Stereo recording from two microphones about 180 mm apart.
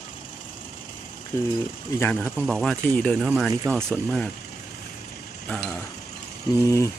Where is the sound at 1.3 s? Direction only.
15° left (ahead or behind).